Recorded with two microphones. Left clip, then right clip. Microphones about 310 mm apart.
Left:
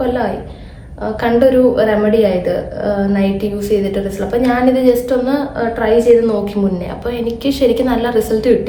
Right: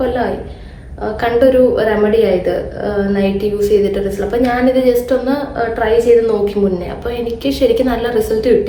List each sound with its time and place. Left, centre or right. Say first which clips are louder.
1.2 s a woman's voice: even; centre